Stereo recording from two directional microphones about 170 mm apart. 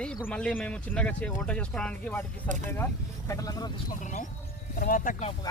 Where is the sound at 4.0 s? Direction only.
50° left (ahead or behind).